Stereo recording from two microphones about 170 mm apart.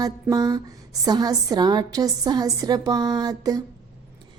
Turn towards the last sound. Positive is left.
turn(degrees=-20)  # may be behind; listen again after turning